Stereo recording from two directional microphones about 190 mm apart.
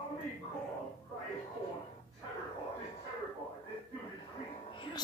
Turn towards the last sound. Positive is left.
turn(degrees=25)  # may be behind; listen again after turning